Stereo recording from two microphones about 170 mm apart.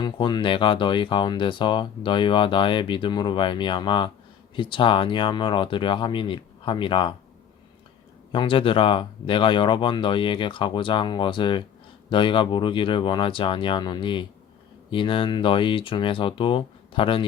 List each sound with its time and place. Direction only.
0.0 s speech: 25° left (ahead or behind)
8.3 s speech: 30° left (ahead or behind)